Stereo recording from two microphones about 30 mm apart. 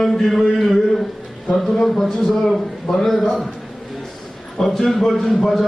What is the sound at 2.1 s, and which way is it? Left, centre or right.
A man's voice, centre.